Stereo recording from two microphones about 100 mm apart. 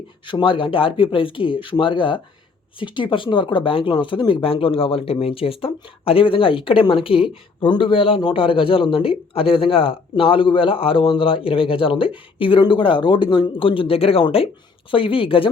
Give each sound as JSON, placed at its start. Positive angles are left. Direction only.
{"t": 0.3, "sound": "speech", "side_deg": 55}